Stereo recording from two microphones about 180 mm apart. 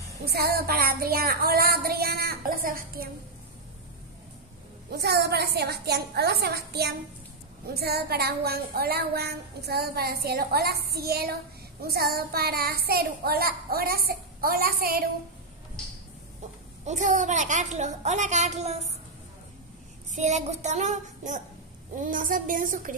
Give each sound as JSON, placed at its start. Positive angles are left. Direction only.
{"t": 0.2, "sound": "a woman's voice", "side_deg": -60}
{"t": 4.9, "sound": "a woman's voice", "side_deg": -65}
{"t": 16.8, "sound": "a child's voice", "side_deg": -40}
{"t": 20.1, "sound": "a child's voice", "side_deg": -40}